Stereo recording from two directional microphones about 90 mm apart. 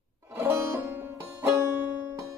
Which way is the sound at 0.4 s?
30° right (ahead or behind).